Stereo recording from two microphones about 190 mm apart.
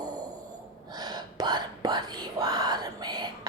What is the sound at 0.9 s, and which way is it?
Whispering, 20° right (ahead or behind).